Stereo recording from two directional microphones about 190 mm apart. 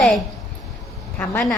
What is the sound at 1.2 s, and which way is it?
Speech, 10° left (ahead or behind).